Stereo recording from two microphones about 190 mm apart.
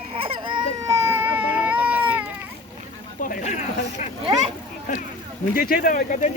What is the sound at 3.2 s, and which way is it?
Speech, 45° left (ahead or behind).